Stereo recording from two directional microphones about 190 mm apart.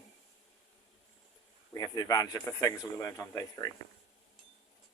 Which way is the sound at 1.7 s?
20° left (ahead or behind).